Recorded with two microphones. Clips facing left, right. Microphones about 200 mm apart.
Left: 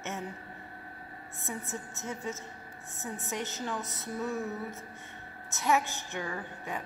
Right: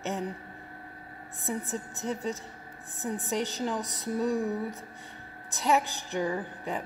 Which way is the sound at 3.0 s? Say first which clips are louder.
Right 6 dB; 15° right (ahead or behind).